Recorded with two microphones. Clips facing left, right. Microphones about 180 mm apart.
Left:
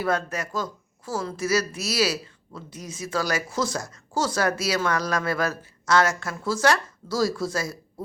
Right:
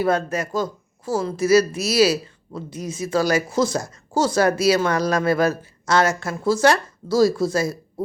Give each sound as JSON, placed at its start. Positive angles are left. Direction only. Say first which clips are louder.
{"t": 0.0, "sound": "speech", "louder": "right 5 dB", "side_deg": -25}